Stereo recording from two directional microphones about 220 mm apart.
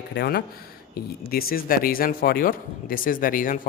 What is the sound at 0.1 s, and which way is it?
Speech, 50° left (ahead or behind).